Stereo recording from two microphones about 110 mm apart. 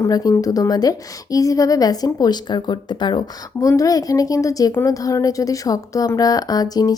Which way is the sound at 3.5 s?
30° left (ahead or behind).